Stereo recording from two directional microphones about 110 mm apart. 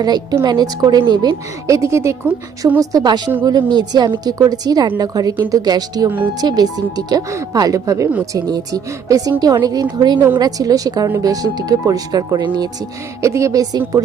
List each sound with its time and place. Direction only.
0.0 s a woman's voice: 40° right (ahead or behind)
2.7 s a woman's voice: 35° right (ahead or behind)
13.2 s a woman's voice: 30° right (ahead or behind)